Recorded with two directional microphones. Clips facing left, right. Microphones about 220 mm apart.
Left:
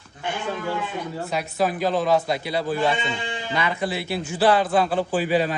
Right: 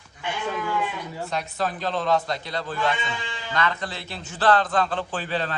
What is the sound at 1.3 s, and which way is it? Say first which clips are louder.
A man's voice: left 4 dB; 10° left (ahead or behind).